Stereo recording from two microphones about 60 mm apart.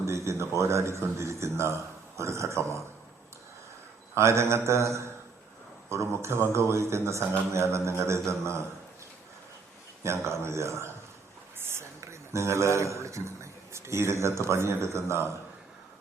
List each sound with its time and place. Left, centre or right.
0.0 s a man's voice: right
4.1 s speech: right
10.0 s a man's voice: right